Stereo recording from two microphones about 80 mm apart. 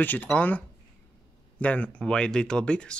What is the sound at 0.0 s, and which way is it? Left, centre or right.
Speech, left.